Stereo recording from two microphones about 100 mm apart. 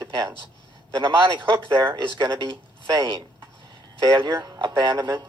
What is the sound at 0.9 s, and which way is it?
Speech, 50° right (ahead or behind).